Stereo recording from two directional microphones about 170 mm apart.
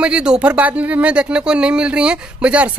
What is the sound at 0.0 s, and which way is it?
Speech, 5° right (ahead or behind).